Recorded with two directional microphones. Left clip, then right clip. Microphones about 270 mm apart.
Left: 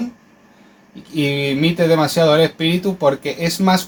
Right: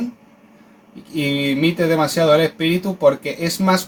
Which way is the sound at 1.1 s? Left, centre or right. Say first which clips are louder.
Left 1 dB; left.